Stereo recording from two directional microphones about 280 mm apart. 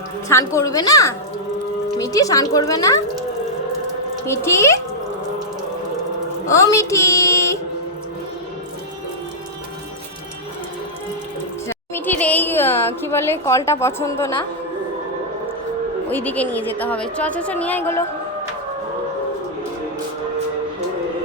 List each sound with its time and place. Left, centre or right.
0.3 s speech: centre
4.3 s speech: centre
6.4 s a woman's voice: centre
11.7 s a woman's voice: centre
16.0 s a woman's voice: centre